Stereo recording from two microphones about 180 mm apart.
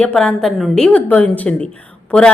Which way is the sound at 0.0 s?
5° left (ahead or behind).